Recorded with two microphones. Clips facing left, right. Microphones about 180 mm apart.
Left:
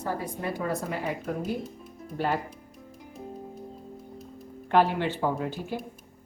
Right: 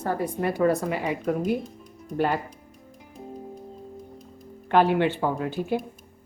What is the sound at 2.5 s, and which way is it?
Music, 5° left (ahead or behind).